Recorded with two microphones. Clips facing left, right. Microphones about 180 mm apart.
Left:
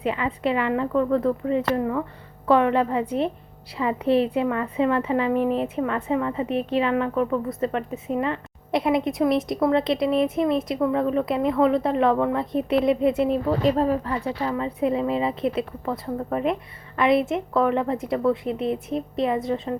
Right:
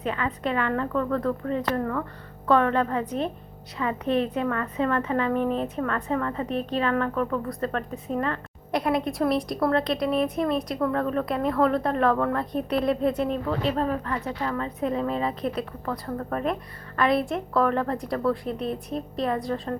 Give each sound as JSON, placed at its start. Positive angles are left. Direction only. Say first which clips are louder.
{"t": 0.0, "sound": "a sound", "louder": "left 3 dB", "side_deg": 25}
{"t": 0.4, "sound": "a woman's voice", "louder": "left 4 dB", "side_deg": 25}
{"t": 3.8, "sound": "a woman's voice", "louder": "left 4 dB", "side_deg": 30}
{"t": 4.4, "sound": "a woman's voice", "louder": "left 3 dB", "side_deg": 15}
{"t": 5.6, "sound": "speech", "louder": "left 3 dB", "side_deg": 10}
{"t": 6.5, "sound": "a woman's voice", "louder": "left 3 dB", "side_deg": 25}
{"t": 6.9, "sound": "speech", "louder": "left 3 dB", "side_deg": 15}
{"t": 8.2, "sound": "a woman's voice", "louder": "left 2 dB", "side_deg": 20}
{"t": 13.5, "sound": "speech", "louder": "left 5 dB", "side_deg": 40}
{"t": 14.3, "sound": "a woman's voice", "louder": "left 3 dB", "side_deg": 15}
{"t": 16.0, "sound": "a woman's voice", "louder": "left 3 dB", "side_deg": 15}